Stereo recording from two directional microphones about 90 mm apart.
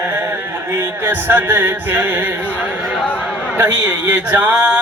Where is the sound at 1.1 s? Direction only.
25° right (ahead or behind).